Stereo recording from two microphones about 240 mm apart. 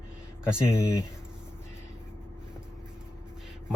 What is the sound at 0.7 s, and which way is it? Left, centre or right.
Speech, centre.